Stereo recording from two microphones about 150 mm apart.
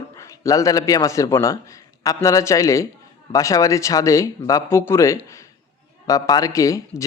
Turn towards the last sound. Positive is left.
turn(degrees=20)  # may be behind; listen again after turning